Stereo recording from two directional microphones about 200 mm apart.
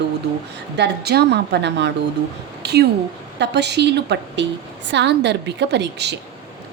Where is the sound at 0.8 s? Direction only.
55° right (ahead or behind).